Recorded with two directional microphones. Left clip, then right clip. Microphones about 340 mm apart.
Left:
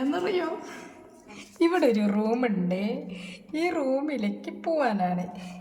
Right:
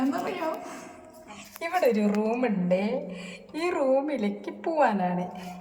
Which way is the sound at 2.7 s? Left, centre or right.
Left.